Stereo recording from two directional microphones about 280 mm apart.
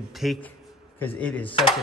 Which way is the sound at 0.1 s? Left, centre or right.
Centre.